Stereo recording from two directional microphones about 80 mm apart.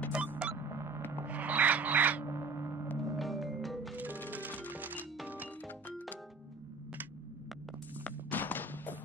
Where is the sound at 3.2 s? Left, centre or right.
Centre.